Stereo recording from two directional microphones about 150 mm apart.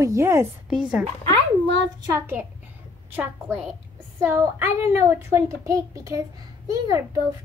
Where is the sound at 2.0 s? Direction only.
20° right (ahead or behind).